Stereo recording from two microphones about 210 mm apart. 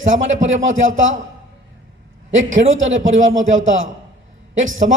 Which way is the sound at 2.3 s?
65° right (ahead or behind).